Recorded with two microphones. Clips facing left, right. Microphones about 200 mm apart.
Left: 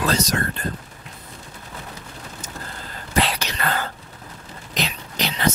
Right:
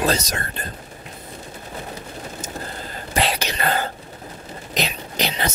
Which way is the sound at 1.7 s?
25° right (ahead or behind).